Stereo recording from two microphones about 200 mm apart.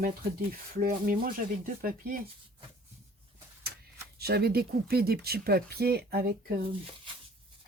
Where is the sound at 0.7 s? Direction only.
45° right (ahead or behind).